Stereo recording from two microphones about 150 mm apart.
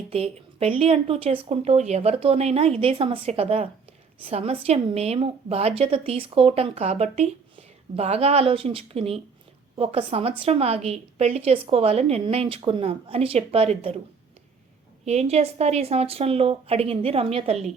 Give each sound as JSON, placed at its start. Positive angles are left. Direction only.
{"t": 0.1, "sound": "a woman's voice", "side_deg": -40}
{"t": 15.0, "sound": "a woman's voice", "side_deg": -45}